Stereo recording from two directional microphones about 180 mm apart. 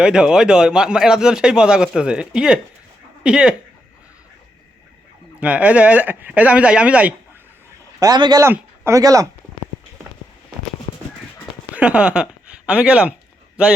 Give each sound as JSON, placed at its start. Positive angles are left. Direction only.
{"t": 0.0, "sound": "a man's voice", "side_deg": -5}
{"t": 5.4, "sound": "speech", "side_deg": -5}
{"t": 7.9, "sound": "speech", "side_deg": -20}
{"t": 11.7, "sound": "speech", "side_deg": -5}